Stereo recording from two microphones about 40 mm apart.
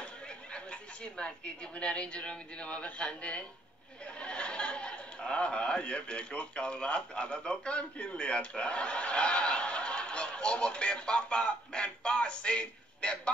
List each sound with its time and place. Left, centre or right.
0.5 s a woman's voice: left